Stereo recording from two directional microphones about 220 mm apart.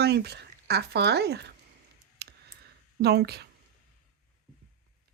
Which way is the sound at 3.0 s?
45° right (ahead or behind).